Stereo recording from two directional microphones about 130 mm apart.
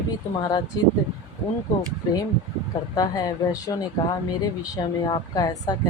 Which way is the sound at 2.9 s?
30° left (ahead or behind).